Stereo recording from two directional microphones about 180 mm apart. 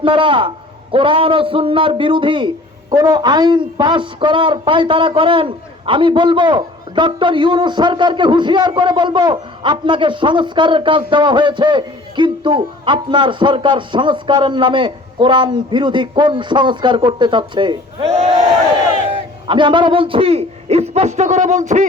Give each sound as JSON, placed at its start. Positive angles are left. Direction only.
{"t": 0.0, "sound": "speech", "side_deg": -30}
{"t": 19.5, "sound": "a man's voice", "side_deg": -25}